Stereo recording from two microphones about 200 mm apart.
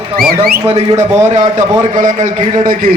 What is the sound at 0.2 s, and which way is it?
A man's voice, 50° right (ahead or behind).